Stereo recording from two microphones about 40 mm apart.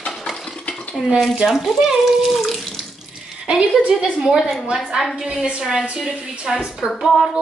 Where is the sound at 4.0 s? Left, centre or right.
Centre.